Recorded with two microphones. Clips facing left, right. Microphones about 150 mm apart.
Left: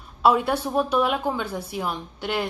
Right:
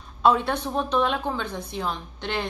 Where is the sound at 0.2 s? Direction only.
10° left (ahead or behind).